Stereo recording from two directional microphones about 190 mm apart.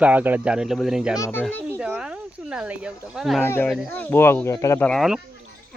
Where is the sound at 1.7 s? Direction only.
5° right (ahead or behind).